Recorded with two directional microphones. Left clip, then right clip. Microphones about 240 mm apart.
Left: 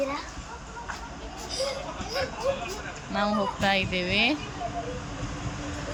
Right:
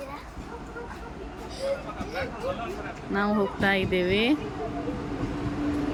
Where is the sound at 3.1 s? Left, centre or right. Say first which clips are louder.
Even; centre.